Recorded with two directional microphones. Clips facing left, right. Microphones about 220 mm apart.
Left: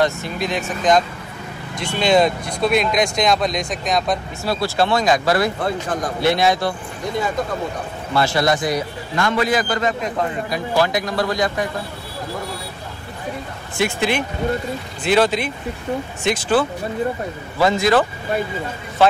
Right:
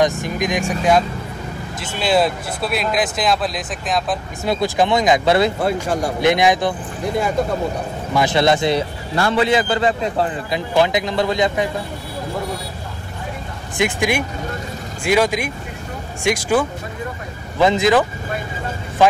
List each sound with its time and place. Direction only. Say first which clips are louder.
0.0 s speech: right 2 dB; 15° right (ahead or behind)
4.5 s a man's voice: right 2 dB; 15° right (ahead or behind)
5.6 s speech: right 3 dB; 10° right (ahead or behind)
8.1 s a man's voice: right 2 dB; 15° right (ahead or behind)
13.7 s a man's voice: right 1 dB; 15° right (ahead or behind)